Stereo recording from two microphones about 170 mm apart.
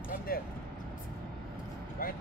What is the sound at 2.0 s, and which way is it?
Speech, 60° left (ahead or behind).